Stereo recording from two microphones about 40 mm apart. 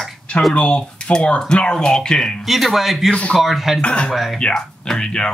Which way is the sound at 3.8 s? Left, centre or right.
Left.